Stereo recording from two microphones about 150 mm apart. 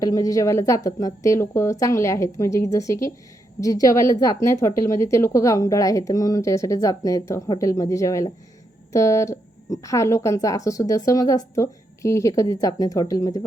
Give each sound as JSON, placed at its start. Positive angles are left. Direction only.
{"t": 0.0, "sound": "a woman's voice", "side_deg": 25}